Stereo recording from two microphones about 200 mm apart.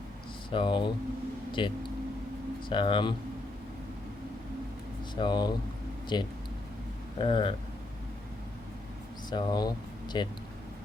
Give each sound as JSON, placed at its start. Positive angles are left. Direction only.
{"t": 0.5, "sound": "speech", "side_deg": 25}
{"t": 5.1, "sound": "speech", "side_deg": 20}
{"t": 9.3, "sound": "speech", "side_deg": 20}